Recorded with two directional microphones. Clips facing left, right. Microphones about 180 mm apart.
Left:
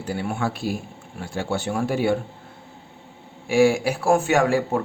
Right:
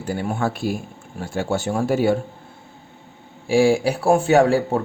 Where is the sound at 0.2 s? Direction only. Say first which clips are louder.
Right 3 dB; 40° right (ahead or behind).